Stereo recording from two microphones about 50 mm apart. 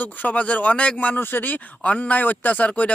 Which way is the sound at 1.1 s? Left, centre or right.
Left.